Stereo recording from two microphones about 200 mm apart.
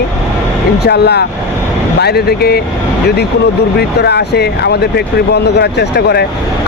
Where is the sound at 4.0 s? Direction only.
55° left (ahead or behind).